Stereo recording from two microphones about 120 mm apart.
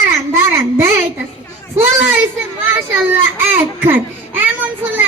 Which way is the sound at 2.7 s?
15° right (ahead or behind).